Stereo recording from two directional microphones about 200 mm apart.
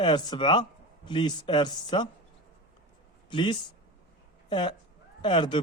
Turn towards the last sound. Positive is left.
turn(degrees=25)  # may be behind; listen again after turning